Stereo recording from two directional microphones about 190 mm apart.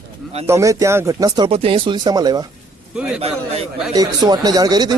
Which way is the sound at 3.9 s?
20° right (ahead or behind).